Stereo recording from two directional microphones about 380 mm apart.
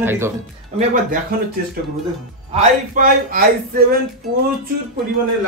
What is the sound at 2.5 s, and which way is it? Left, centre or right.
A man's voice, right.